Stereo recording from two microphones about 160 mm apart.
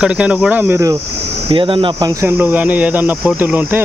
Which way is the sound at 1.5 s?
35° right (ahead or behind).